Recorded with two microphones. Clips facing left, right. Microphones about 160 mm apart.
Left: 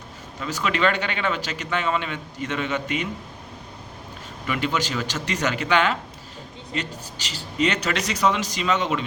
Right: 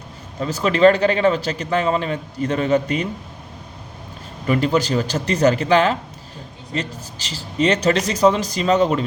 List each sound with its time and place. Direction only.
0.3 s speech: 35° right (ahead or behind)
4.4 s speech: 35° right (ahead or behind)
7.3 s speech: 30° right (ahead or behind)